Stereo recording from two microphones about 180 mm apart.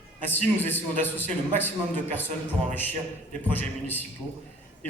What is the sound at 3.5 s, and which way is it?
Speech, 10° left (ahead or behind).